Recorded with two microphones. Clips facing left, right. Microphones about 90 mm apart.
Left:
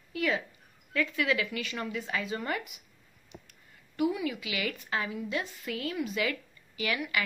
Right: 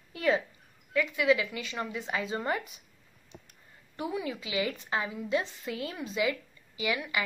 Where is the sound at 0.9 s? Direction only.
20° right (ahead or behind).